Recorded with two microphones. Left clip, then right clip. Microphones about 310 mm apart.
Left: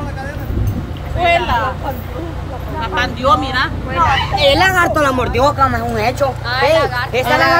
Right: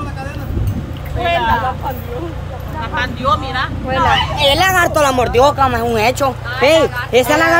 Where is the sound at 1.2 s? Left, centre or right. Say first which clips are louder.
Left 1 dB; left.